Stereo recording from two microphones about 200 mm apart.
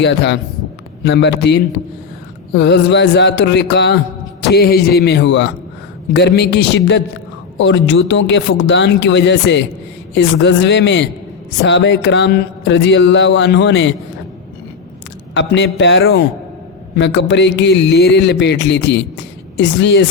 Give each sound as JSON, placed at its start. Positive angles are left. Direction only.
{"t": 0.0, "sound": "speech", "side_deg": 60}
{"t": 15.4, "sound": "speech", "side_deg": 65}